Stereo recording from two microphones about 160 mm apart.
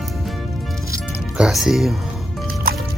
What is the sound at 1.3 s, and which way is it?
Speech, 5° right (ahead or behind).